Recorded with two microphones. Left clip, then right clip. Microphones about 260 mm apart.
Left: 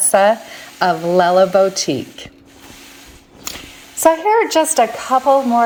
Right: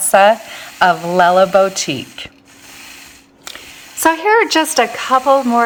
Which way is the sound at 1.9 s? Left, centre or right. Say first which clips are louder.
Left 1 dB; right.